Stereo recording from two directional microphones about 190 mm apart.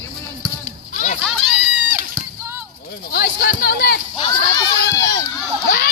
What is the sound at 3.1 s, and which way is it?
Speech, 55° left (ahead or behind).